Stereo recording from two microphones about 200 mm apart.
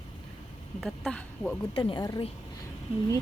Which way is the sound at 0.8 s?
Centre (ahead or behind).